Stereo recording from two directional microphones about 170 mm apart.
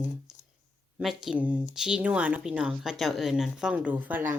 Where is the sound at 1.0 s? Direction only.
5° right (ahead or behind).